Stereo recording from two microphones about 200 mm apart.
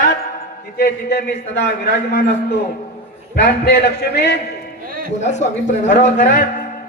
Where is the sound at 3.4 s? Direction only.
55° left (ahead or behind).